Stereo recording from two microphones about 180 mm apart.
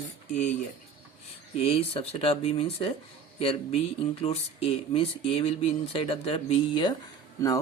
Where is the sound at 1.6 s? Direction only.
35° left (ahead or behind).